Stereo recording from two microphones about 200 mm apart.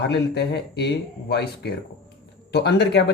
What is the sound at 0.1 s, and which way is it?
Speech, 55° left (ahead or behind).